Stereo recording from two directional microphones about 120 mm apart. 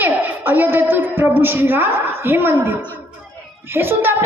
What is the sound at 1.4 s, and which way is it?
A woman's voice, 15° right (ahead or behind).